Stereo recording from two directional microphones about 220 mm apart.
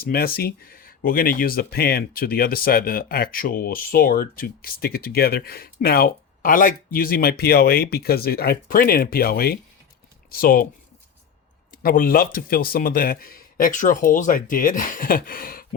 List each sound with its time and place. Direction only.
0.0 s speech: 45° left (ahead or behind)
11.7 s speech: 40° left (ahead or behind)